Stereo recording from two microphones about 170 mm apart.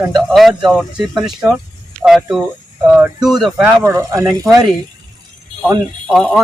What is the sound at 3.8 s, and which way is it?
Speech, 15° right (ahead or behind).